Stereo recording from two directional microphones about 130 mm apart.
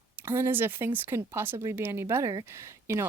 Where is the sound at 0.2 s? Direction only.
20° right (ahead or behind).